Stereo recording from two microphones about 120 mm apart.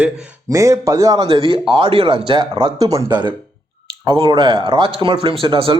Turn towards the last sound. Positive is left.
turn(degrees=-45)  # may be behind; listen again after turning